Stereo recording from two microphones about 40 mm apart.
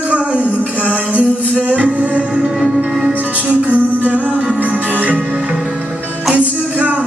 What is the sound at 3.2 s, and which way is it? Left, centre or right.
Music, left.